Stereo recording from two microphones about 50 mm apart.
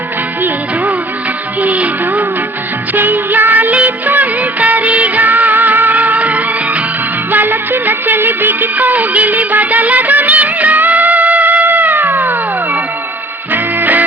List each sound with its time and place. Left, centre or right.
1.6 s music: right
2.9 s music of bollywood: right
7.3 s music: right
13.5 s music: right